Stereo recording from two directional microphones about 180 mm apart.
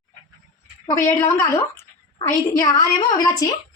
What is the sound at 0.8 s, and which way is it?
A woman's voice, 15° left (ahead or behind).